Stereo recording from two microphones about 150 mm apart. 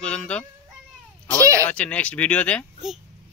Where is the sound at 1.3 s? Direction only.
20° right (ahead or behind).